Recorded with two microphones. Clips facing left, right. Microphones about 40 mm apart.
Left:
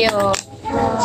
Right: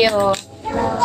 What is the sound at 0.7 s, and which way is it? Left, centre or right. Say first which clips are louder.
Speech: left 2 dB; centre.